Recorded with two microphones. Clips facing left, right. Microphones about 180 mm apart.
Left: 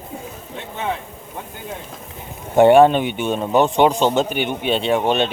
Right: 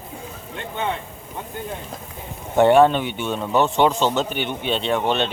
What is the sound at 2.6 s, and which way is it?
A man's voice, 15° left (ahead or behind).